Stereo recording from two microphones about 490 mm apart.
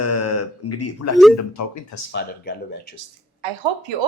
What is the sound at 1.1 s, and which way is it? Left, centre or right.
Speech, centre.